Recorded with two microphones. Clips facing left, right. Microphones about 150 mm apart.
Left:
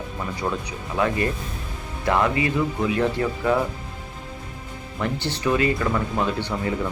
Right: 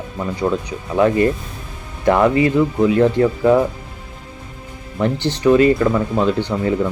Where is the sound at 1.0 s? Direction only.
30° right (ahead or behind).